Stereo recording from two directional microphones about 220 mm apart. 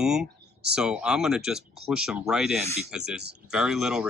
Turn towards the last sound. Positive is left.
turn(degrees=0)  # may be behind; listen again after turning